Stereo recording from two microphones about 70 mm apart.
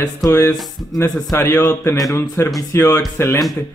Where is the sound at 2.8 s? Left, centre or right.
Left.